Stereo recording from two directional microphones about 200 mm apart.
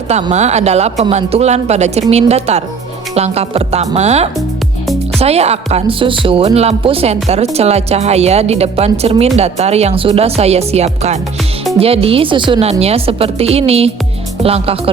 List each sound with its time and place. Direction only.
0.1 s speech: 35° right (ahead or behind)